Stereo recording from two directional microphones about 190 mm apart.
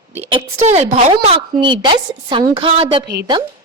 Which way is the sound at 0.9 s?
30° right (ahead or behind).